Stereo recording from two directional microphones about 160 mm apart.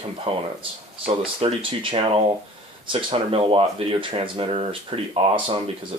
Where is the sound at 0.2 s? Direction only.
35° right (ahead or behind).